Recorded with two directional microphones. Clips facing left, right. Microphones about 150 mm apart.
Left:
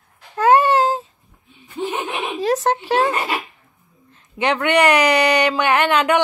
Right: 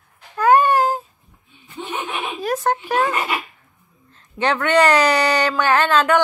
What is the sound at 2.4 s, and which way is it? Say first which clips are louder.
Speech: left 2 dB; 20° left (ahead or behind).